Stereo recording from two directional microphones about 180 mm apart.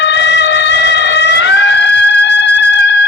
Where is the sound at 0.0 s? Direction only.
75° left (ahead or behind).